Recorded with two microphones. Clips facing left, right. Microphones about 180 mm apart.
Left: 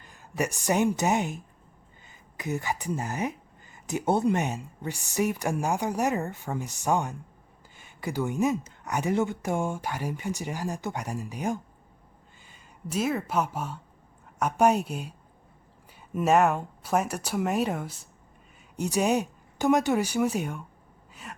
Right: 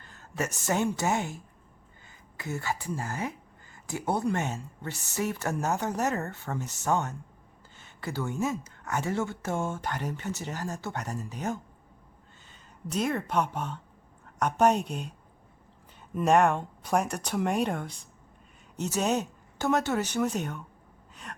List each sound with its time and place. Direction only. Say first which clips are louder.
0.0 s speech: left 3 dB; 15° left (ahead or behind)
16.1 s speech: left 1 dB; 5° left (ahead or behind)
21.3 s a sound: left 1 dB; 5° left (ahead or behind)